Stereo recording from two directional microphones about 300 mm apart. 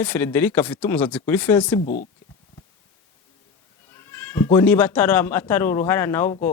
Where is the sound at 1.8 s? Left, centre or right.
Left.